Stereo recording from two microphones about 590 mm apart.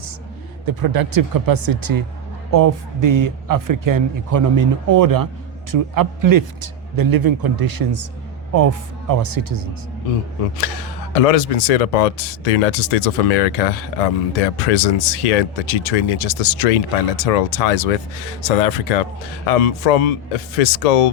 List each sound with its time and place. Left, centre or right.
0.6 s speech: right
11.1 s speech: left